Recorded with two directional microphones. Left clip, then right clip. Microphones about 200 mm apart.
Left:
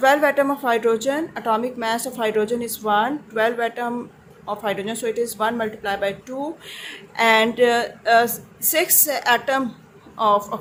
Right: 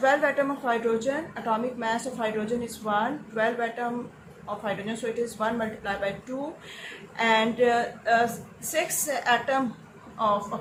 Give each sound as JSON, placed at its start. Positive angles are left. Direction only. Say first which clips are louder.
{"t": 0.0, "sound": "a woman's voice", "louder": "left 6 dB", "side_deg": 60}